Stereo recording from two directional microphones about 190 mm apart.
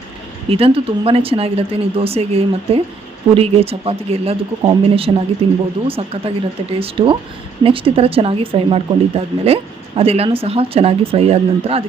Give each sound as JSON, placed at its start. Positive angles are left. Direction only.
{"t": 0.5, "sound": "speech", "side_deg": -30}